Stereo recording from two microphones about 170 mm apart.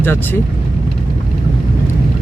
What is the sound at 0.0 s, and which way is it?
Speech, 10° left (ahead or behind).